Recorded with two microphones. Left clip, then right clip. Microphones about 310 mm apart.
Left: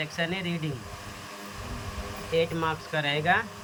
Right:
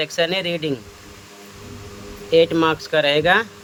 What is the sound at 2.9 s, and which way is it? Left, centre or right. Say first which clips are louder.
Speech: right 9 dB; centre.